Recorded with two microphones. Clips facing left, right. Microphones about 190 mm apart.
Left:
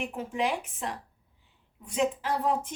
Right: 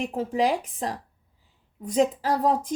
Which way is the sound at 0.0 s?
35° right (ahead or behind).